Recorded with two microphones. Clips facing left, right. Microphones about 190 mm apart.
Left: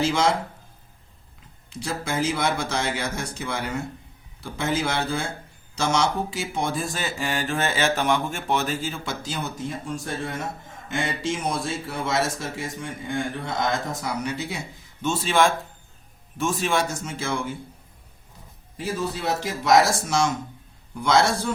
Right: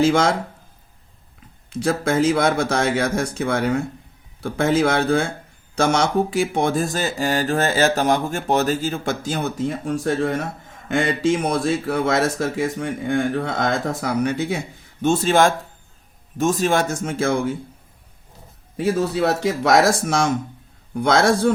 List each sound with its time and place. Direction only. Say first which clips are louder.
0.0 s speech: right 6 dB; 50° right (ahead or behind)
1.8 s speech: right 8 dB; 55° right (ahead or behind)
18.8 s speech: right 9 dB; 65° right (ahead or behind)